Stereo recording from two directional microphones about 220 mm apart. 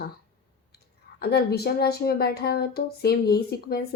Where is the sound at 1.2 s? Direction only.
45° left (ahead or behind).